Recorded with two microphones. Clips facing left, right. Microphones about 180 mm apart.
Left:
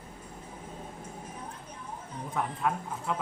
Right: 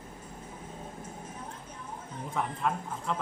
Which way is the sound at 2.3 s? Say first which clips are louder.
Left 1 dB; 5° left (ahead or behind).